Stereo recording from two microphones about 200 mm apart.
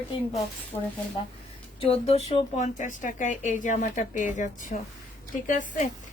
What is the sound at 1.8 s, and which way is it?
Speech, 30° left (ahead or behind).